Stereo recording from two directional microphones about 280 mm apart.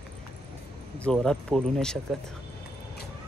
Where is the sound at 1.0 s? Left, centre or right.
Centre.